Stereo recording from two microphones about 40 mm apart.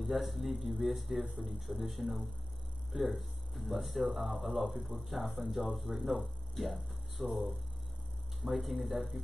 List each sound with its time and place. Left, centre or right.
0.0 s speech: centre
7.2 s speech: right
8.4 s speech: centre